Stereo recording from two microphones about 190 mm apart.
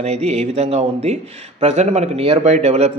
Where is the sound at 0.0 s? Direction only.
35° right (ahead or behind).